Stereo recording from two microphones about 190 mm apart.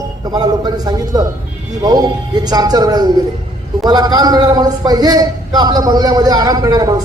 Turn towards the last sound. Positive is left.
turn(degrees=-20)  # may be behind; listen again after turning